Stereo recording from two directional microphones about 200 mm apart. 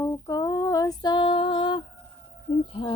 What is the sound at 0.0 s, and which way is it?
Female singing, 15° left (ahead or behind).